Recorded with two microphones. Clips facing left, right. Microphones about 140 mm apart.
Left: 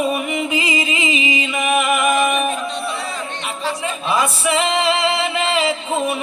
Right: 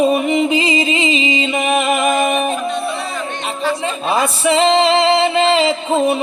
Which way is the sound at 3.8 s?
30° right (ahead or behind).